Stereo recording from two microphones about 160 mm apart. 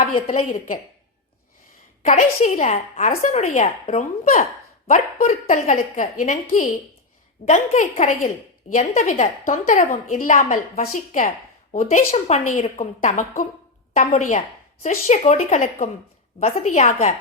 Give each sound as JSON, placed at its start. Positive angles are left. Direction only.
{"t": 2.0, "sound": "a woman's voice", "side_deg": 50}
{"t": 12.1, "sound": "a woman's voice", "side_deg": 40}